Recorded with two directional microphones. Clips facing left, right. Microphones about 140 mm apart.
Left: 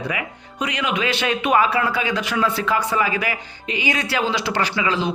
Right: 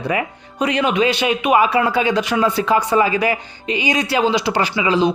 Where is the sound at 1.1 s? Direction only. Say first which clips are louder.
Right 3 dB; 15° right (ahead or behind).